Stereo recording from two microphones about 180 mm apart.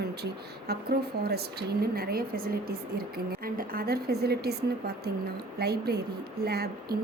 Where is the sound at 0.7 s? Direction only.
60° right (ahead or behind).